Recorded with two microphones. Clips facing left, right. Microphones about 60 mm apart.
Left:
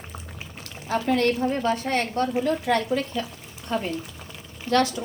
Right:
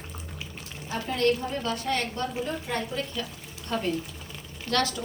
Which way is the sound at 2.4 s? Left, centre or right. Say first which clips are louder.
Left 8 dB; left.